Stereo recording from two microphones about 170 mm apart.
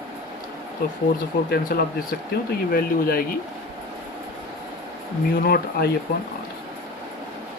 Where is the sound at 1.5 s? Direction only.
65° left (ahead or behind).